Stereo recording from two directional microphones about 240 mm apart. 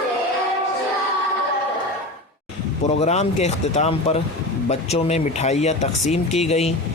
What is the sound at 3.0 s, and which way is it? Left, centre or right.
Speech, left.